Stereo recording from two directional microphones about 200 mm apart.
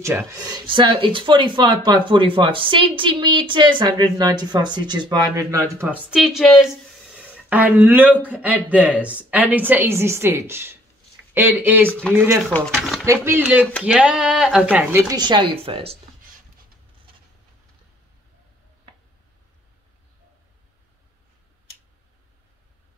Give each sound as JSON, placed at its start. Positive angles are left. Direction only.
{"t": 0.0, "sound": "a woman's voice", "side_deg": -15}
{"t": 13.0, "sound": "a woman's voice", "side_deg": -15}